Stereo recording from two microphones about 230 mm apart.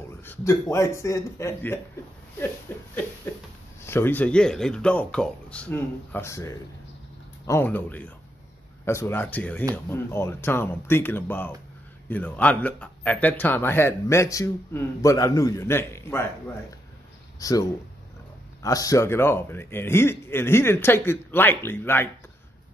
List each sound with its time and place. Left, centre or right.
0.2 s a man's voice: centre